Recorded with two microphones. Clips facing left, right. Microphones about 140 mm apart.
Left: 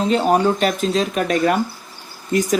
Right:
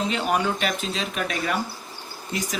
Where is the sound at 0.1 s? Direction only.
35° left (ahead or behind).